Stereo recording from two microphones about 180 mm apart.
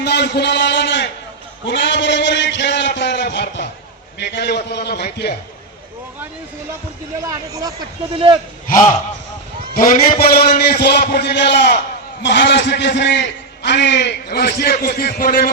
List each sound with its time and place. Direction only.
0.0 s a man's voice: 70° left (ahead or behind)
1.6 s a sound: 80° left
4.2 s a man's voice: 70° left (ahead or behind)
7.3 s speech: 20° right (ahead or behind)
9.7 s a man's voice: 50° left (ahead or behind)